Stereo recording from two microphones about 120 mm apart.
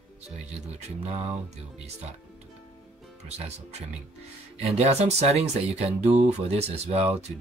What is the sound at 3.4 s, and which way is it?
Speech, 65° right (ahead or behind).